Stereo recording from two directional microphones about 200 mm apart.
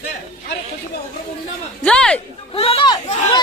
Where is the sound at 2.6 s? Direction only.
25° left (ahead or behind).